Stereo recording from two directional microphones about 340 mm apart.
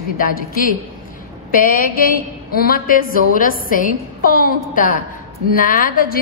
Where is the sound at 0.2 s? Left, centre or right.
Left.